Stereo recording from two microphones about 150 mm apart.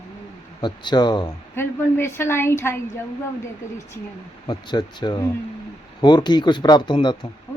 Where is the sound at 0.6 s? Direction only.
30° left (ahead or behind).